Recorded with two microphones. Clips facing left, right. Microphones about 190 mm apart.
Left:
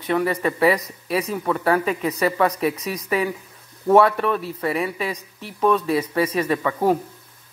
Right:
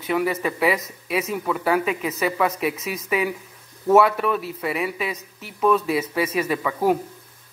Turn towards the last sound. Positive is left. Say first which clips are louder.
# left 2 dB
turn(degrees=-5)  # may be behind; listen again after turning